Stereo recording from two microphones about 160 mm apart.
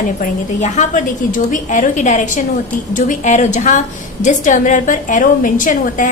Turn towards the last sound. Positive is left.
turn(degrees=55)  # may be behind; listen again after turning